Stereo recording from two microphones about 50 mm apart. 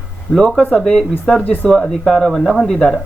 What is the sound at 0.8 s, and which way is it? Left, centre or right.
Speech, centre.